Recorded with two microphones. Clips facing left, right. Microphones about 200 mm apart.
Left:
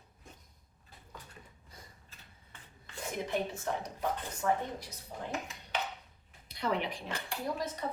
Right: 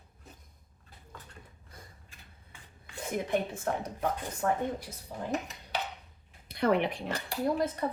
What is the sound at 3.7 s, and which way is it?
Speech, 50° right (ahead or behind).